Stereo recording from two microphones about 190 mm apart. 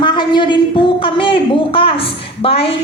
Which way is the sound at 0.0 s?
25° left (ahead or behind).